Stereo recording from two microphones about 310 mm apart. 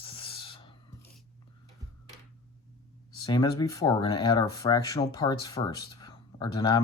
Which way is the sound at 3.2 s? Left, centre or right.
Centre.